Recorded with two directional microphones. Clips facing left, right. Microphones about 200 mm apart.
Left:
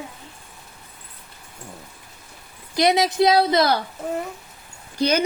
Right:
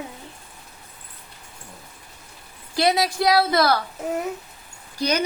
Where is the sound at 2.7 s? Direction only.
20° left (ahead or behind).